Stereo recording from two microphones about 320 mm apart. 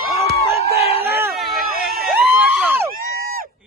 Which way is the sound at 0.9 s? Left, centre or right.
Centre.